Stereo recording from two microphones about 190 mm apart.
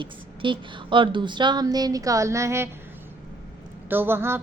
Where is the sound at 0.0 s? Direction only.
25° right (ahead or behind).